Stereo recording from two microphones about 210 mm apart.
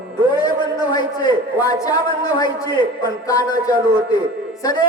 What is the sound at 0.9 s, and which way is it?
A man's voice, 15° left (ahead or behind).